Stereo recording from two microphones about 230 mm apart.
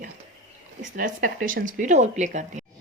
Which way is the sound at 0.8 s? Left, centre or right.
Right.